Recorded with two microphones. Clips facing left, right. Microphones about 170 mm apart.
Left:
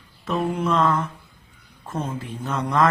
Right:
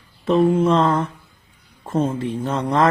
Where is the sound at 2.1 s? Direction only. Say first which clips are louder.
Right 6 dB; 30° right (ahead or behind).